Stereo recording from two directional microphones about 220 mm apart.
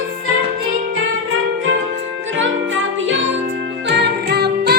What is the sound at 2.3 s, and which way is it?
Music, 60° right (ahead or behind).